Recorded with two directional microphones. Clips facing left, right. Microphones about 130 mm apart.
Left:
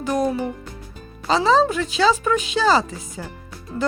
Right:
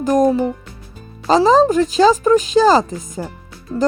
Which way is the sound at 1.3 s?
40° right (ahead or behind).